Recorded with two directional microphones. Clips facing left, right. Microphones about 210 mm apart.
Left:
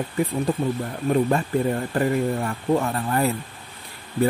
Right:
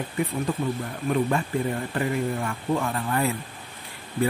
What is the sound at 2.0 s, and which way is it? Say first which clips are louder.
Speech: left 4 dB; 40° left (ahead or behind).